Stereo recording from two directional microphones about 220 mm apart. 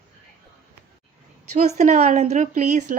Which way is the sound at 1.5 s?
30° right (ahead or behind).